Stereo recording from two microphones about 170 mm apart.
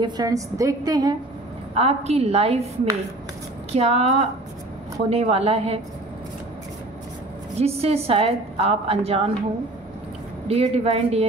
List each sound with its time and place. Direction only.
0.0 s a woman's voice: 20° right (ahead or behind)
1.7 s a woman's voice: 40° right (ahead or behind)
7.6 s a woman's voice: 35° right (ahead or behind)
10.5 s a woman's voice: 35° right (ahead or behind)